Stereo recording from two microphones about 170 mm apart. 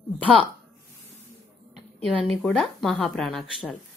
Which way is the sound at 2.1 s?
Centre (ahead or behind).